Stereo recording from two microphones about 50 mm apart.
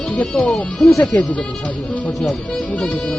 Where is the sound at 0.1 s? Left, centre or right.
Left.